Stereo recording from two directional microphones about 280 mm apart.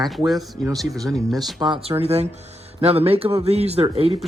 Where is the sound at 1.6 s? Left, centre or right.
Centre.